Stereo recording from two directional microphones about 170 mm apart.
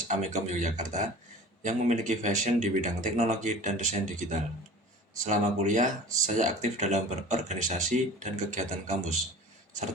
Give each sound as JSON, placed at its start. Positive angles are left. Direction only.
{"t": 0.1, "sound": "speech", "side_deg": -45}